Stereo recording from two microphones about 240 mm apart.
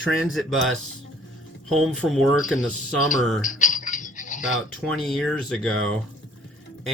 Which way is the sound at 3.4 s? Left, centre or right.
Left.